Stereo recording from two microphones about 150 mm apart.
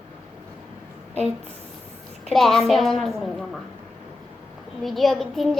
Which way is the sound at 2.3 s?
Centre (ahead or behind).